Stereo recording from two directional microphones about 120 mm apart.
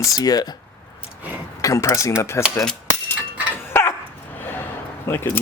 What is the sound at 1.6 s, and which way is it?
Speech, 25° left (ahead or behind).